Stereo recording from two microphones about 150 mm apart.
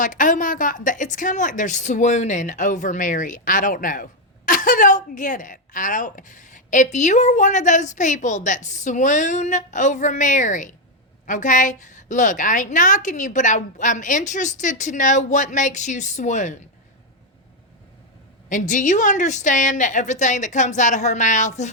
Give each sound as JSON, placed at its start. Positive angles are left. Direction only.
{"t": 0.0, "sound": "a woman's voice", "side_deg": 60}
{"t": 18.4, "sound": "a woman's voice", "side_deg": 55}